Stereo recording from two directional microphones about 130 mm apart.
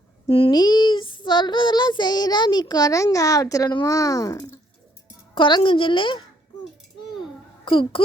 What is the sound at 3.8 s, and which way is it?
Speech, 25° left (ahead or behind).